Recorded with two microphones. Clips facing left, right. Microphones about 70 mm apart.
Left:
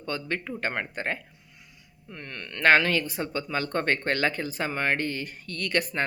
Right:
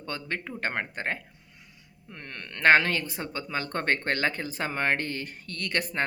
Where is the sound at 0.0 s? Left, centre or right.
Right.